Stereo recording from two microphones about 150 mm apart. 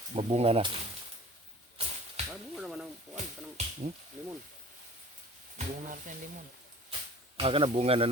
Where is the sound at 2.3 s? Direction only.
Centre (ahead or behind).